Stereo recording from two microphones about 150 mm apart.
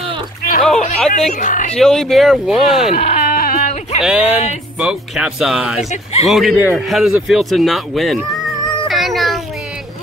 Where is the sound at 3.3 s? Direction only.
70° left (ahead or behind).